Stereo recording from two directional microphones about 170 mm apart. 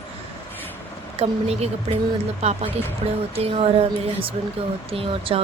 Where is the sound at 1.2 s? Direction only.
35° right (ahead or behind).